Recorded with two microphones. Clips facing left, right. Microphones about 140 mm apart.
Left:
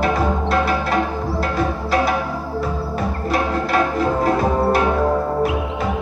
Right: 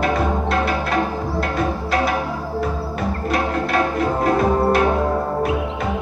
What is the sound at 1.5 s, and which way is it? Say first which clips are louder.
Music: left 2 dB; 55° right (ahead or behind).